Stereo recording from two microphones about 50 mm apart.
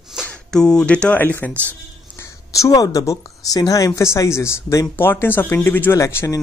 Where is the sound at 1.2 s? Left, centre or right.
Left.